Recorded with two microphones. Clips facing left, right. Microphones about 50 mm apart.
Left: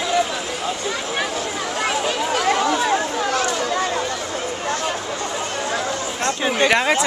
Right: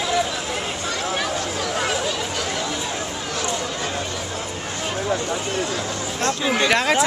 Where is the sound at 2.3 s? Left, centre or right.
Left.